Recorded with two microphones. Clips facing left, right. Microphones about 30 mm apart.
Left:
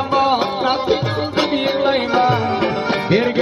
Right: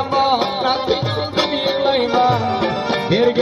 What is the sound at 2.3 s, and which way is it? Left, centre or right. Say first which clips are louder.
Music: even; centre.